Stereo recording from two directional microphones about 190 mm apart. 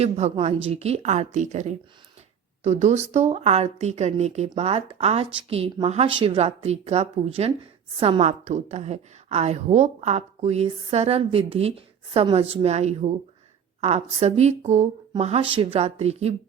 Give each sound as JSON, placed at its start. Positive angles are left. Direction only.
{"t": 0.0, "sound": "a woman's voice", "side_deg": -35}